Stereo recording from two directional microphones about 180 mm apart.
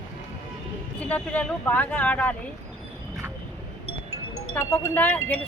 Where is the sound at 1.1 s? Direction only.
10° left (ahead or behind).